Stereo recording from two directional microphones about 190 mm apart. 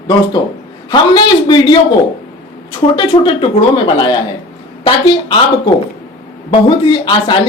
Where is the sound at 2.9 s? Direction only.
25° left (ahead or behind).